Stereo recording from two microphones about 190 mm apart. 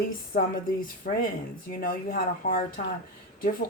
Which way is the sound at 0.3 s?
50° left (ahead or behind).